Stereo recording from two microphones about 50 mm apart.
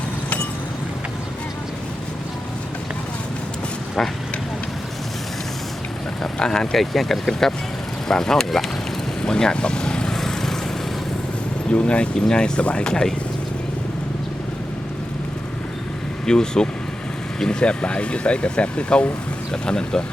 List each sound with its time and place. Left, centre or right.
6.2 s speech: centre
9.2 s vehicle: centre
11.7 s speech: left
16.2 s speech: centre